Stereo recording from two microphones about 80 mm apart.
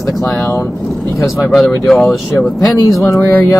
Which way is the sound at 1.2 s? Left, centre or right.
Centre.